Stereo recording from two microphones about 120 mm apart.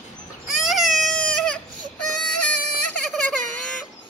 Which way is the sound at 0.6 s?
Centre (ahead or behind).